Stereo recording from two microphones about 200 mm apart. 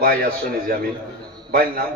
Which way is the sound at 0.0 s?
45° right (ahead or behind).